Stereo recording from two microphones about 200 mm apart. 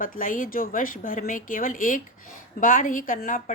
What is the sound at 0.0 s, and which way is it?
Speech, 45° left (ahead or behind).